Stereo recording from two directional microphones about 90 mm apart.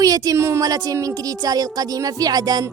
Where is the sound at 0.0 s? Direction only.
40° right (ahead or behind).